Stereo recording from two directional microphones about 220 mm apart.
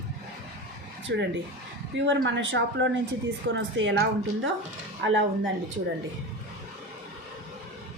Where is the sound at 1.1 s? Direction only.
50° right (ahead or behind).